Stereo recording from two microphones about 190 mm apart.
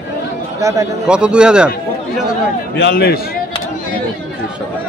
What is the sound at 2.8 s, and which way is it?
Speech, 55° left (ahead or behind).